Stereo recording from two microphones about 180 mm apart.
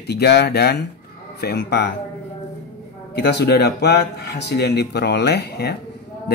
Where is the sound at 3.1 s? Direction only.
70° left (ahead or behind).